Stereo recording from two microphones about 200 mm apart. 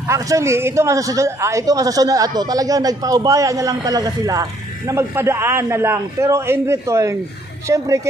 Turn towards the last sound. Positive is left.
turn(degrees=-15)  # may be behind; listen again after turning